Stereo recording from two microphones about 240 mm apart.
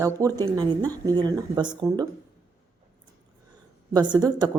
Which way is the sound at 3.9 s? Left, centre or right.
Centre.